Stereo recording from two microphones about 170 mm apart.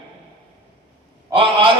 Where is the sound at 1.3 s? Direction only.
30° right (ahead or behind).